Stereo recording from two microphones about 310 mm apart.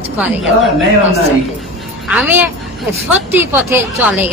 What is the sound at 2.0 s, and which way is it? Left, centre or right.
A woman's voice, centre.